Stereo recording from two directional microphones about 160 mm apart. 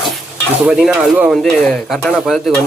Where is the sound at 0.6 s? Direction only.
5° right (ahead or behind).